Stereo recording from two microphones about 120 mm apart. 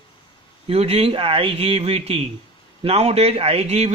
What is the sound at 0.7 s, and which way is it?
Speech, 55° right (ahead or behind).